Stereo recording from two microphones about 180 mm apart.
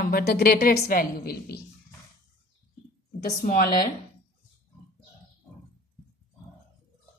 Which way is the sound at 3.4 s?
55° left (ahead or behind).